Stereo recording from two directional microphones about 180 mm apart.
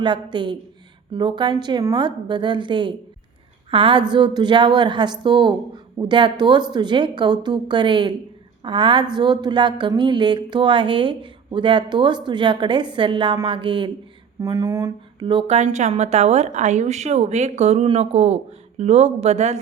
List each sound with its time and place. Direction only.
0.0 s speech: 25° right (ahead or behind)